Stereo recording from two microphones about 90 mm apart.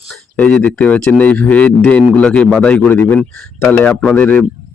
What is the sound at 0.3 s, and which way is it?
A man's voice, 15° left (ahead or behind).